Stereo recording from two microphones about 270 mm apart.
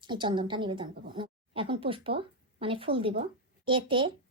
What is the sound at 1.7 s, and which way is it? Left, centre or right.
A woman's voice, centre.